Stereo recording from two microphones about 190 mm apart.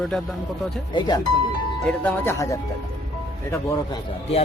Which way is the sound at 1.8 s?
10° left (ahead or behind).